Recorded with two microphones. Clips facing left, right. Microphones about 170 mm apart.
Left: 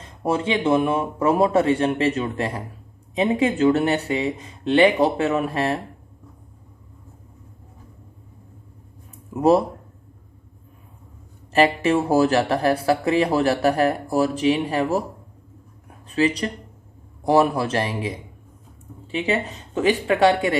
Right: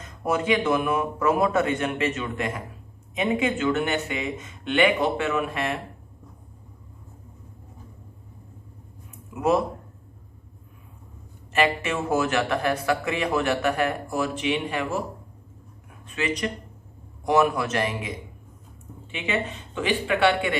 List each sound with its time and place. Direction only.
0.0 s speech: 30° left (ahead or behind)
9.3 s speech: 35° left (ahead or behind)
11.5 s speech: 35° left (ahead or behind)
15.9 s a sound: 35° left (ahead or behind)
17.2 s speech: 35° left (ahead or behind)